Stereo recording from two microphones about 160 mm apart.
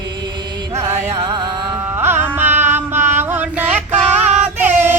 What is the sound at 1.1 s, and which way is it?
Music, 20° right (ahead or behind).